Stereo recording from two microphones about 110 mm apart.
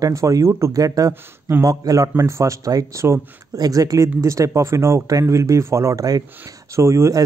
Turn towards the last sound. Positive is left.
turn(degrees=-25)  # may be behind; listen again after turning